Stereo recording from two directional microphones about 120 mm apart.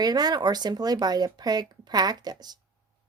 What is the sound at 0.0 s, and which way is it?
A woman's voice, 35° right (ahead or behind).